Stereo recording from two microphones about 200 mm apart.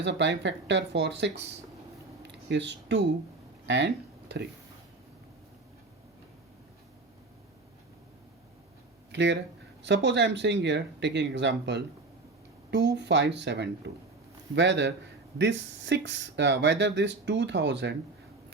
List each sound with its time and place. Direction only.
0.0 s speech: 60° right (ahead or behind)
3.7 s a sound: 60° right (ahead or behind)
9.1 s speech: 60° right (ahead or behind)